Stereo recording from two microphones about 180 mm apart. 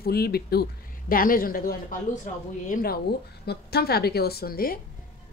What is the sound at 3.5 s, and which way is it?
A woman's voice, 60° left (ahead or behind).